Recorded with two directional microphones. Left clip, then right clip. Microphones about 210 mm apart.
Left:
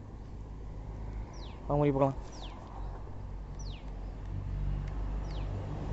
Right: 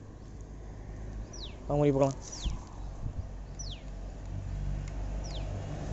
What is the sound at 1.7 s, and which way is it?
Speech, 10° right (ahead or behind).